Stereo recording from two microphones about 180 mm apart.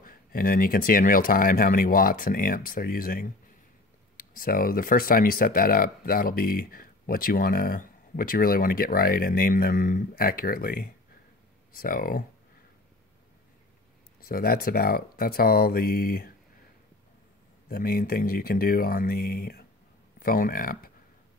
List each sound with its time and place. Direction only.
0.0 s speech: 50° left (ahead or behind)
14.2 s speech: 55° left (ahead or behind)
17.6 s speech: 55° left (ahead or behind)